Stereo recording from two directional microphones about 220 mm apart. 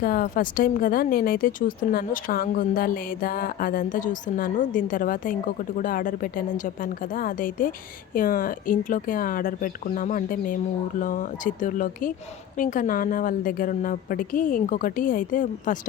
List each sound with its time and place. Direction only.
0.0 s speech: 40° left (ahead or behind)